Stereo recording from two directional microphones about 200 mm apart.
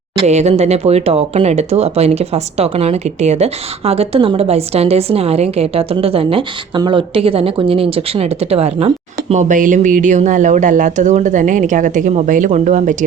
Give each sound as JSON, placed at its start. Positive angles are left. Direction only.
{"t": 0.3, "sound": "speech", "side_deg": -35}